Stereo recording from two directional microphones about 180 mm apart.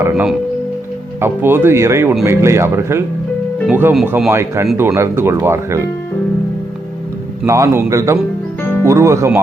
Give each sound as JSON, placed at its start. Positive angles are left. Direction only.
{"t": 0.0, "sound": "speech", "side_deg": -10}
{"t": 7.4, "sound": "speech", "side_deg": -15}
{"t": 8.6, "sound": "music", "side_deg": 10}
{"t": 8.9, "sound": "speech", "side_deg": -15}